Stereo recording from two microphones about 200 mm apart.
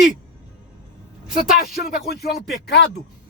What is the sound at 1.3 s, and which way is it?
Speech, 50° left (ahead or behind).